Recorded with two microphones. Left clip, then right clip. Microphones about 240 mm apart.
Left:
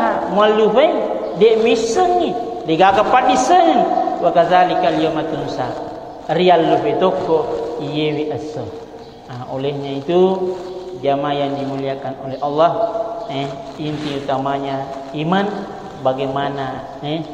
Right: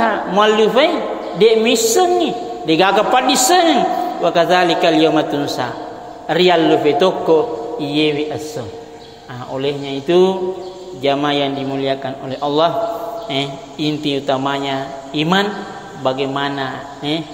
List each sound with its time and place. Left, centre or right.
0.0 s a man's voice: right
9.6 s a man's voice: right